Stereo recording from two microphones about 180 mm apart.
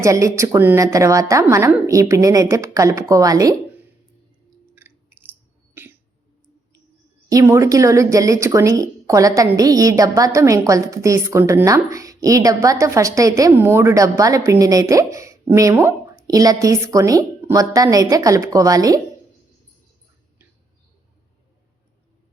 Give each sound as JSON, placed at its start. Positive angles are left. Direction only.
{"t": 0.0, "sound": "speech", "side_deg": -15}
{"t": 4.7, "sound": "a sound", "side_deg": -10}
{"t": 5.8, "sound": "hiccup", "side_deg": -10}
{"t": 7.3, "sound": "speech", "side_deg": -15}